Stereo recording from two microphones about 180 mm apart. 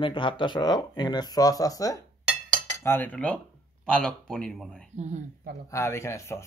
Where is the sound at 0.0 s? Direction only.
30° left (ahead or behind); by 4.8 s 5° left (ahead or behind).